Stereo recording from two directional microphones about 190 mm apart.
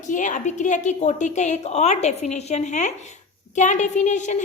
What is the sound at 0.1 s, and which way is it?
Speech, 40° left (ahead or behind).